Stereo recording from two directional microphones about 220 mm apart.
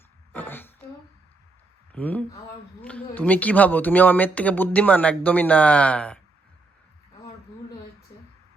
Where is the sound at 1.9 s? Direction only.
5° left (ahead or behind).